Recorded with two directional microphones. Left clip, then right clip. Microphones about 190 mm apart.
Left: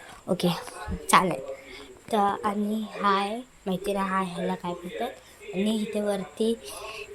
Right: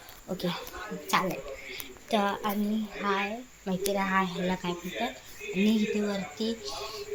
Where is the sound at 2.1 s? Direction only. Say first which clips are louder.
Left 4 dB; 15° left (ahead or behind).